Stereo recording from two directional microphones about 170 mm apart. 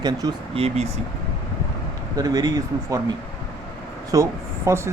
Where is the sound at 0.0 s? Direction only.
25° right (ahead or behind).